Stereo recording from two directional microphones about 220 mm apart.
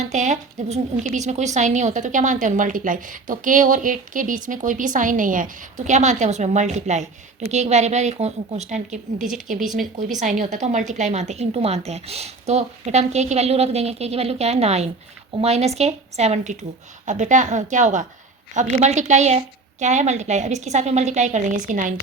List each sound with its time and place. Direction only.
0.0 s speech: 30° right (ahead or behind)
9.1 s speech: centre (ahead or behind)
10.2 s a woman's voice: 35° right (ahead or behind)